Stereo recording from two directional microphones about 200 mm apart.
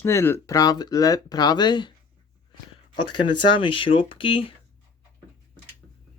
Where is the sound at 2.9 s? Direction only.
25° left (ahead or behind).